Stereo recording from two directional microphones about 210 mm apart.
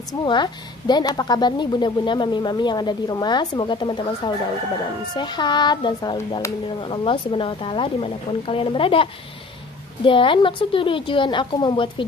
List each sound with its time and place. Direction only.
0.1 s a woman's voice: 20° left (ahead or behind)